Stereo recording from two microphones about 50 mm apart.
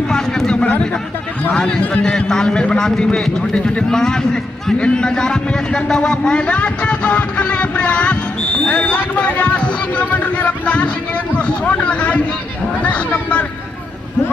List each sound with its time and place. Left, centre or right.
0.1 s a sound: centre
1.5 s a man's voice: centre
1.8 s a man's voice: left
2.1 s a man's voice: centre
3.2 s a man's voice: centre
3.5 s a man's voice: centre